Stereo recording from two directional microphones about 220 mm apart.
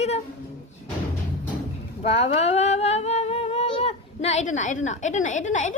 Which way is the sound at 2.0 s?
30° left (ahead or behind).